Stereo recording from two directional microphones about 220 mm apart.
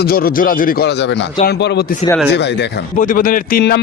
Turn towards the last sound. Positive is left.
turn(degrees=45)  # may be behind; listen again after turning